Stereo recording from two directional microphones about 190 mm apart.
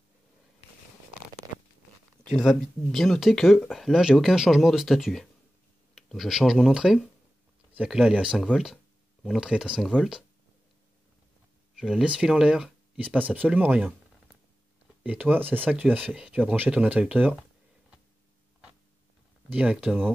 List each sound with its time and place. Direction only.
2.3 s speech: centre (ahead or behind)
11.7 s speech: centre (ahead or behind)
19.5 s speech: 5° right (ahead or behind)